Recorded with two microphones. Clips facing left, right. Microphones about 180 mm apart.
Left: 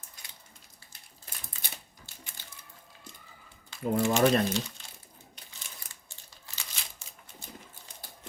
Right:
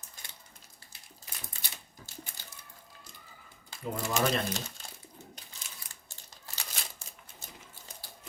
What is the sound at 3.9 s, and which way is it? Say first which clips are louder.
Speech: left 7 dB; 40° left (ahead or behind).